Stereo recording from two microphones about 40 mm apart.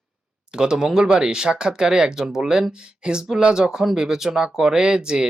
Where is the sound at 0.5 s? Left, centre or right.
Centre.